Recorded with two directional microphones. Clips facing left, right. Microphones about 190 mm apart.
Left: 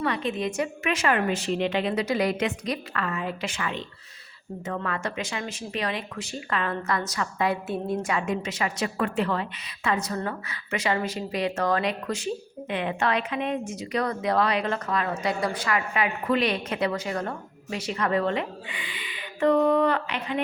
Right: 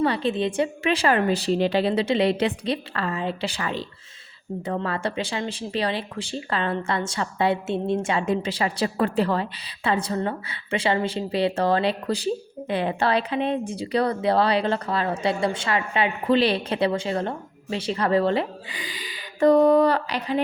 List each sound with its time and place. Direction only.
0.0 s speech: 30° right (ahead or behind)